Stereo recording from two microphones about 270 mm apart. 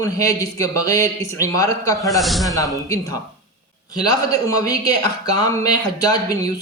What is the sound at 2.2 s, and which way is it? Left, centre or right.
Speech, centre.